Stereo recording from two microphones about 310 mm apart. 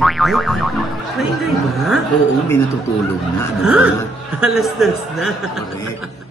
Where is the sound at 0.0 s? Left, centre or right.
Centre.